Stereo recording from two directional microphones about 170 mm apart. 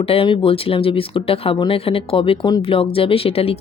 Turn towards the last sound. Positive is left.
turn(degrees=35)  # may be behind; listen again after turning